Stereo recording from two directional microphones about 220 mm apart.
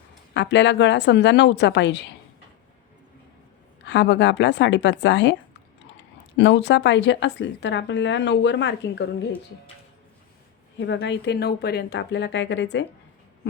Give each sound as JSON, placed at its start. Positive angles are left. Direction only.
{"t": 0.3, "sound": "speech", "side_deg": 55}
{"t": 3.8, "sound": "speech", "side_deg": 55}
{"t": 10.8, "sound": "speech", "side_deg": 50}